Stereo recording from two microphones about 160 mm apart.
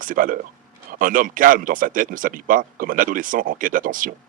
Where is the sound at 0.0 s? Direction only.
60° right (ahead or behind).